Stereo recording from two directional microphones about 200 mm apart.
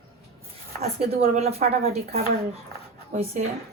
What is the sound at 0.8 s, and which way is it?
Speech, 30° right (ahead or behind).